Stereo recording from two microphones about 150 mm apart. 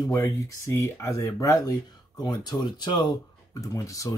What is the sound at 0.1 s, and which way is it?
Speech, 20° left (ahead or behind).